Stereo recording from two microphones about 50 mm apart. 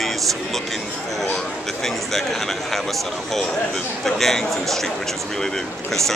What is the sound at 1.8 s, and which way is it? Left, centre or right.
Speech, centre.